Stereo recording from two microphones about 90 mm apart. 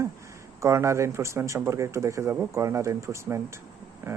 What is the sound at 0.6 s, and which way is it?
Speech, 35° right (ahead or behind).